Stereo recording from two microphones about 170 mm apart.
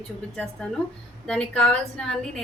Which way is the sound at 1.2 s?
5° left (ahead or behind).